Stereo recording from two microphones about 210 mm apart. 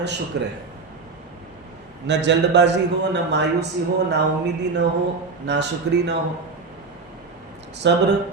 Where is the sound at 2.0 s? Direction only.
55° right (ahead or behind).